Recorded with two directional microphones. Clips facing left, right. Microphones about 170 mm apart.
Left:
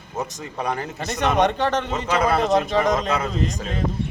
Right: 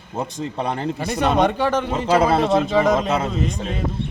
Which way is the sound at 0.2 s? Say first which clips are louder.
Right 3 dB; 30° right (ahead or behind).